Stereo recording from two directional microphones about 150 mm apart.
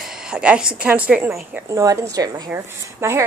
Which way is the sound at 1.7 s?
20° right (ahead or behind).